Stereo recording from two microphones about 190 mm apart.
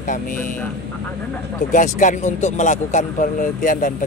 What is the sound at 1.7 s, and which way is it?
Speech, 45° left (ahead or behind).